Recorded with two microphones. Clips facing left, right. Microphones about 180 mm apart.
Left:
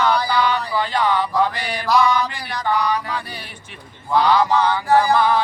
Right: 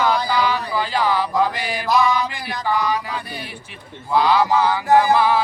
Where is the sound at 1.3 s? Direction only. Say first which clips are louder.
Even; 20° right (ahead or behind).